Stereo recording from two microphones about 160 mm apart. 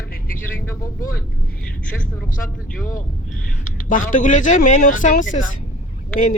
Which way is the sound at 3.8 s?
55° left (ahead or behind).